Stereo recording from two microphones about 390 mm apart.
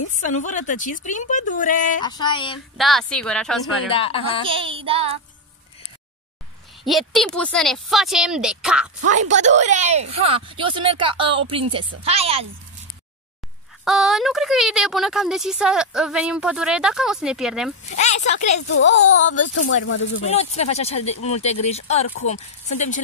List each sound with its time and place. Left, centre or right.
0.2 s a woman's voice: centre
2.8 s speech: centre
3.9 s speech: centre
4.5 s a woman's voice: centre
6.8 s speech: centre
9.3 s a woman's voice: centre
13.8 s speech: centre
17.9 s speech: centre
18.8 s a woman's voice: left
19.4 s speech: left
20.2 s speech: centre